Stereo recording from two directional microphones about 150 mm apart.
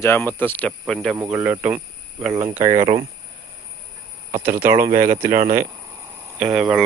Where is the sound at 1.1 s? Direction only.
10° right (ahead or behind).